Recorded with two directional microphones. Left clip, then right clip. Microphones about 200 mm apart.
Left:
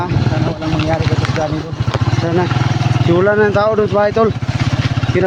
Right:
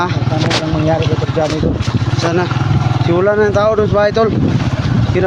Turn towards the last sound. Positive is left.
turn(degrees=0)  # may be behind; listen again after turning